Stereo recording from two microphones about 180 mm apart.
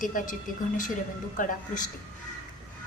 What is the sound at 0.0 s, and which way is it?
Speech, 45° left (ahead or behind).